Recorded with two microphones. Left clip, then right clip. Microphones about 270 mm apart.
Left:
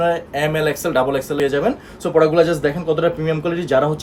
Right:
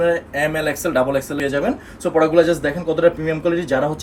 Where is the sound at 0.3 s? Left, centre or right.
Centre.